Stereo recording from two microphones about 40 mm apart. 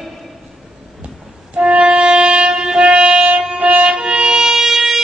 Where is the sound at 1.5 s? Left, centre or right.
Right.